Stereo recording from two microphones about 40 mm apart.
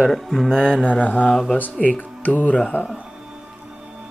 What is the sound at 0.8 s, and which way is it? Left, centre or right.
Mantra, left.